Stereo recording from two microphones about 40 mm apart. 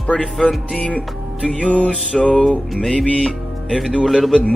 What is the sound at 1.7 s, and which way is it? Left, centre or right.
Music, left.